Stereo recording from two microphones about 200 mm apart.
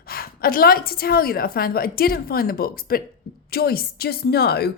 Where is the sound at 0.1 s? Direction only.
50° left (ahead or behind).